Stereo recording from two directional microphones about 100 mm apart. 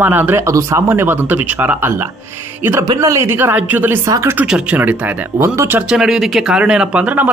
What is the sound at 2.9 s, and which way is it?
Speech, 35° right (ahead or behind).